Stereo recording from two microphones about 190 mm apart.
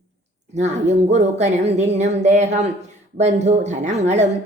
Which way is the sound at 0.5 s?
35° right (ahead or behind).